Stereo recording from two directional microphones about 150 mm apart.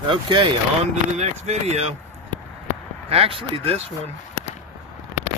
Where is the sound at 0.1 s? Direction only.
35° right (ahead or behind).